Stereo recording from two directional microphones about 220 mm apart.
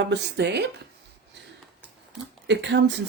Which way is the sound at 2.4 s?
50° right (ahead or behind).